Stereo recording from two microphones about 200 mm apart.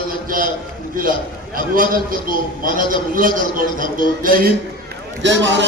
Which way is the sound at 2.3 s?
45° right (ahead or behind).